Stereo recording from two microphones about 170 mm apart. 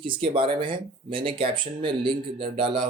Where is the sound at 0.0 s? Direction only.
30° right (ahead or behind).